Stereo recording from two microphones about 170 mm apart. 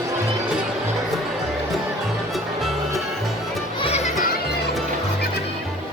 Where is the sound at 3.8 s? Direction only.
40° left (ahead or behind).